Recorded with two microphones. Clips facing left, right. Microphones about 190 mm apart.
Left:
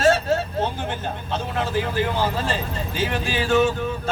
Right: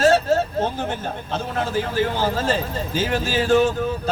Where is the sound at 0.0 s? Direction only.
40° right (ahead or behind).